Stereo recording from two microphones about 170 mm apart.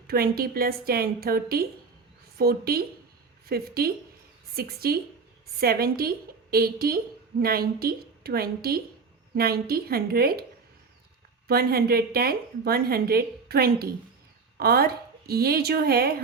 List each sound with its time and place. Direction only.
0.1 s a woman's voice: 65° right (ahead or behind)
11.4 s a woman's voice: 65° right (ahead or behind)